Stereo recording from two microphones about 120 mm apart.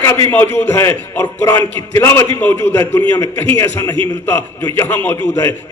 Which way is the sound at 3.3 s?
15° left (ahead or behind).